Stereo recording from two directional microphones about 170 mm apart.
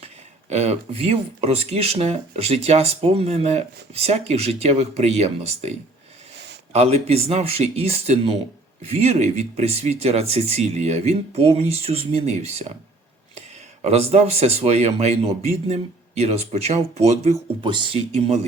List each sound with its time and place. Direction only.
0.5 s speech: 40° right (ahead or behind)
6.7 s speech: 35° right (ahead or behind)
13.8 s speech: 35° right (ahead or behind)
17.6 s speech: 30° right (ahead or behind)